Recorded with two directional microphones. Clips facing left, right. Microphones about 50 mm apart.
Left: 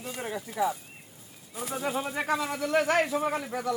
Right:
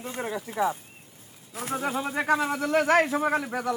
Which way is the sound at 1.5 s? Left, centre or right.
Right.